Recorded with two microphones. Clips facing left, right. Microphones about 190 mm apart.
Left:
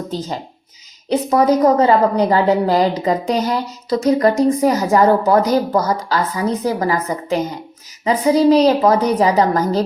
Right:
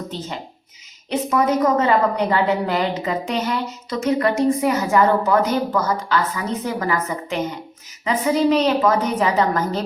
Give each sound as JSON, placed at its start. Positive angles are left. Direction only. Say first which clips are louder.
{"t": 1.1, "sound": "a woman's voice", "louder": "left 5 dB", "side_deg": 35}